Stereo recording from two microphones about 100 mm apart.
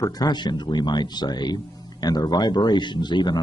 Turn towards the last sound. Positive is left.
turn(degrees=45)  # may be behind; listen again after turning